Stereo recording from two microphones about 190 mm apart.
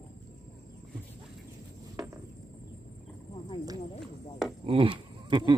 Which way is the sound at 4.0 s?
Centre (ahead or behind).